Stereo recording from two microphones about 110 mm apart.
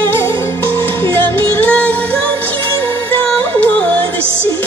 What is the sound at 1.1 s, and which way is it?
Music, 15° left (ahead or behind).